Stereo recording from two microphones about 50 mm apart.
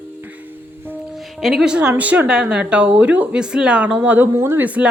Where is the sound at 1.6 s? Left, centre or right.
Centre.